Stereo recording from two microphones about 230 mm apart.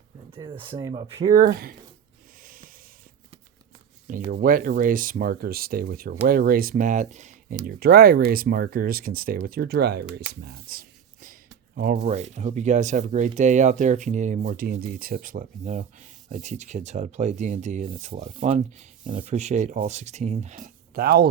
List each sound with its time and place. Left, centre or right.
0.3 s speech: right
1.4 s speech: right
2.4 s a sound: right
4.3 s speech: right